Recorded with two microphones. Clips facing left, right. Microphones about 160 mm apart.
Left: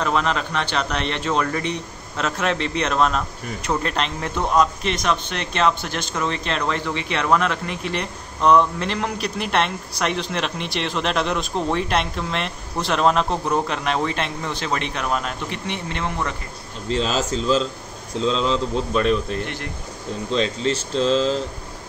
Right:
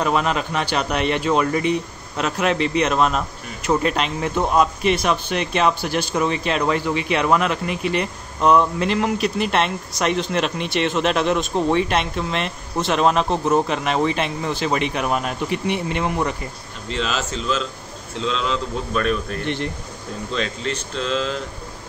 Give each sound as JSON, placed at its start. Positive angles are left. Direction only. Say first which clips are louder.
{"t": 0.0, "sound": "speech", "louder": "right 2 dB", "side_deg": -10}
{"t": 16.9, "sound": "a man's voice", "louder": "left 3 dB", "side_deg": 35}